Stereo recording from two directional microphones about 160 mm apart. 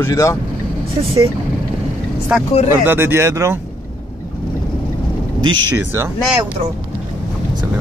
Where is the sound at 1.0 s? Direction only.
35° right (ahead or behind).